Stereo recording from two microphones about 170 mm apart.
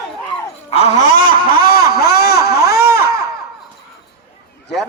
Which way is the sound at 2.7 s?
15° right (ahead or behind).